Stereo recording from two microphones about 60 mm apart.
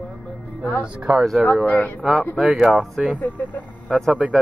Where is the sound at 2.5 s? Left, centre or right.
Centre.